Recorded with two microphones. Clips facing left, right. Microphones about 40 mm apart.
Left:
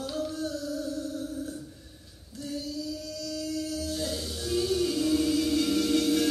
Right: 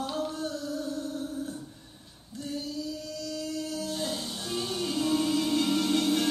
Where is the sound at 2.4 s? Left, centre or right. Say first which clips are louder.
Even; centre.